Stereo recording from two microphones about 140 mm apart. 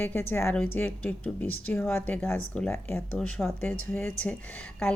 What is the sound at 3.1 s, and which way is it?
A woman's voice, 5° left (ahead or behind).